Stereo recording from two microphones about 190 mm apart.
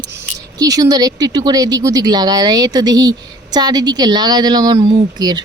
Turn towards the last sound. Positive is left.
turn(degrees=-20)  # may be behind; listen again after turning